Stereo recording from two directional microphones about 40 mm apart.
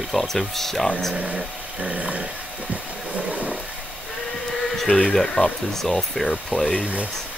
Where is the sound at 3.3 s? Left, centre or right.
Right.